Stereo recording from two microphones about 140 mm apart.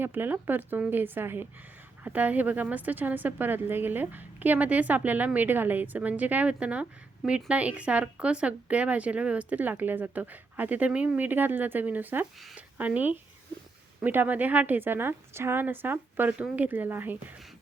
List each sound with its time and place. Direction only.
0.0 s speech: 15° right (ahead or behind)